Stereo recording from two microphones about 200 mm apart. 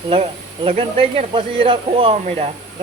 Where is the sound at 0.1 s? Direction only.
30° right (ahead or behind).